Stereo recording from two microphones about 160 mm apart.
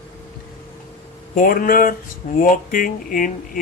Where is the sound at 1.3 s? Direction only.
60° left (ahead or behind).